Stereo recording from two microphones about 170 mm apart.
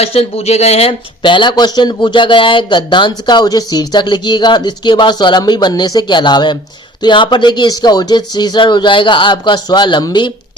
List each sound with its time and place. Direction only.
0.0 s speech: 35° left (ahead or behind)